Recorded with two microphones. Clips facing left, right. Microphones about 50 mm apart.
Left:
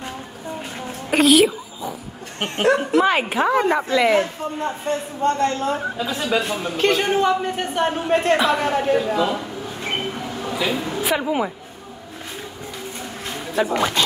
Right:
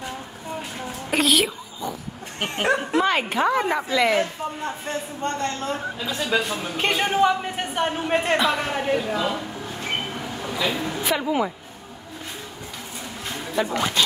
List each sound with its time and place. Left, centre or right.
1.1 s a sound: centre
2.6 s a woman's voice: right
3.0 s a woman's voice: centre
6.8 s speech: centre
8.4 s a woman's voice: centre
10.5 s a sound: centre
13.6 s speech: centre